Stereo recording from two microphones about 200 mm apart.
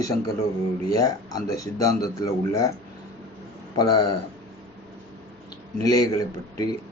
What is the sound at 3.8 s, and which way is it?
Speech, 20° left (ahead or behind).